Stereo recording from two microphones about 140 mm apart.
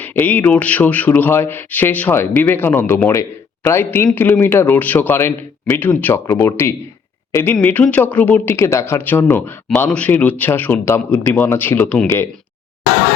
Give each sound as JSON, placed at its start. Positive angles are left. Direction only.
{"t": 0.0, "sound": "speech", "side_deg": 15}